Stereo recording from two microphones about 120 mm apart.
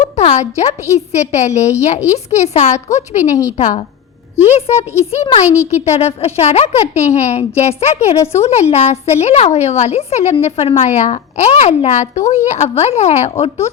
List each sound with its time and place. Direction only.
0.0 s a woman's voice: 70° left (ahead or behind)
4.4 s a woman's voice: 65° left (ahead or behind)